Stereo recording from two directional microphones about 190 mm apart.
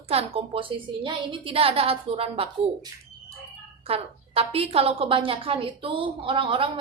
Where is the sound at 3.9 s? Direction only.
30° right (ahead or behind).